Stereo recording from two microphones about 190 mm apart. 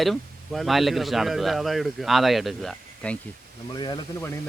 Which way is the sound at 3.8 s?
25° left (ahead or behind).